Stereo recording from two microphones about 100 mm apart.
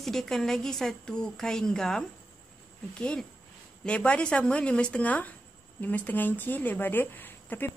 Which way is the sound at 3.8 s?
10° left (ahead or behind).